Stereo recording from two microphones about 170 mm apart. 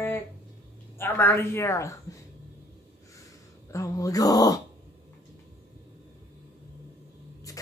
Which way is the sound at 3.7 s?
20° left (ahead or behind).